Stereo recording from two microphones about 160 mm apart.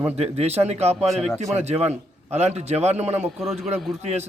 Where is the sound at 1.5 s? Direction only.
40° right (ahead or behind).